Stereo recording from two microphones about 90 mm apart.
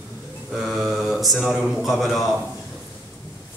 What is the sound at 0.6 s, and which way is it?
Mantra, centre (ahead or behind).